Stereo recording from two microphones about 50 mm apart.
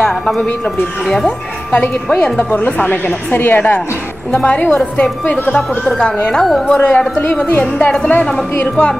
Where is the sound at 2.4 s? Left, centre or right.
Left.